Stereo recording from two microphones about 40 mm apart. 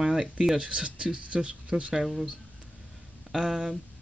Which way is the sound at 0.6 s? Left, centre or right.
Right.